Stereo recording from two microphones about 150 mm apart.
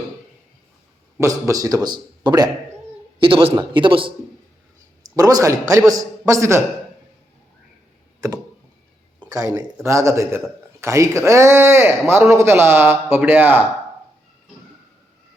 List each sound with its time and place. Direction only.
1.5 s a man's voice: 20° right (ahead or behind)
5.1 s a man's voice: 25° right (ahead or behind)
9.3 s a man's voice: 20° right (ahead or behind)